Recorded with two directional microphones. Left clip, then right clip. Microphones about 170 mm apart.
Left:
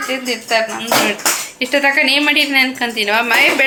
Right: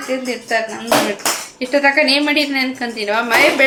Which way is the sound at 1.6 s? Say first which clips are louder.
Even; 5° right (ahead or behind).